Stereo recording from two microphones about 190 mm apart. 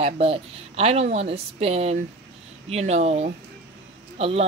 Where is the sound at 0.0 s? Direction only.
30° right (ahead or behind).